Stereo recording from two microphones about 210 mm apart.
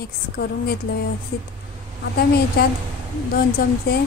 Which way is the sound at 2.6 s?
45° left (ahead or behind).